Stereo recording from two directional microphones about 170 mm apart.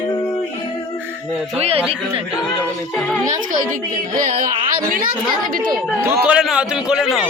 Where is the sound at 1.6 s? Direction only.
35° right (ahead or behind).